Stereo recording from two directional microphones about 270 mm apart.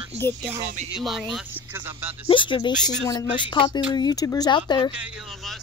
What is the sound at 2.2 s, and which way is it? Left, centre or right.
Speech, centre.